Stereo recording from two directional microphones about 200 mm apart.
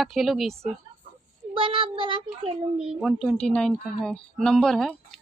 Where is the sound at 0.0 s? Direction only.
Centre (ahead or behind).